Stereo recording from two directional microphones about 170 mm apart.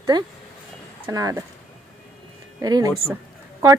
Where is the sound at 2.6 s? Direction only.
20° right (ahead or behind).